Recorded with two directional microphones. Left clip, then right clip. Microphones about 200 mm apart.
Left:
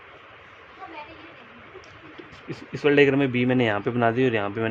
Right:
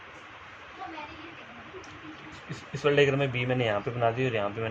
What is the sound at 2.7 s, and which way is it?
Speech, 55° left (ahead or behind).